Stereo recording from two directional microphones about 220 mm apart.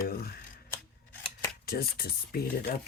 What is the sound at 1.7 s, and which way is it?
Speech, 45° left (ahead or behind).